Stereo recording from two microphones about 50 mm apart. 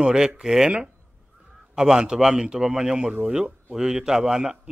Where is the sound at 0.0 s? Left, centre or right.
Centre.